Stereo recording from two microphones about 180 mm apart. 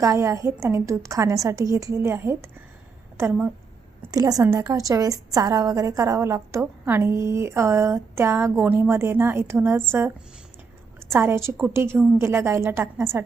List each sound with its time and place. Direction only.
0.0 s a woman's voice: 15° right (ahead or behind)
11.1 s a woman's voice: 15° right (ahead or behind)